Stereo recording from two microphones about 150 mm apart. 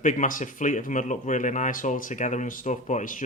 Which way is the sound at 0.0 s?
60° left (ahead or behind).